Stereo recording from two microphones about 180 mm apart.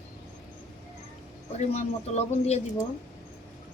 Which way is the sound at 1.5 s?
35° left (ahead or behind).